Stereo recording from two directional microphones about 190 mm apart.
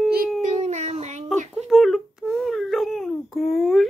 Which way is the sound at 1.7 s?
Centre (ahead or behind).